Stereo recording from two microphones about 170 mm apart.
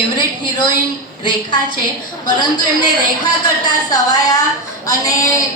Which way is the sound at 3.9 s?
20° left (ahead or behind).